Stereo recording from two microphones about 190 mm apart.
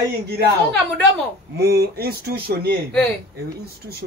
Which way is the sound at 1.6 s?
55° right (ahead or behind).